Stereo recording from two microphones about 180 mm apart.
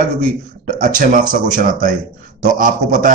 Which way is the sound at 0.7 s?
50° right (ahead or behind).